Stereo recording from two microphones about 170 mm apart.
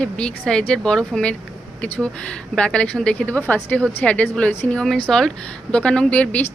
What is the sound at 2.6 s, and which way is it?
A woman's voice, 5° left (ahead or behind).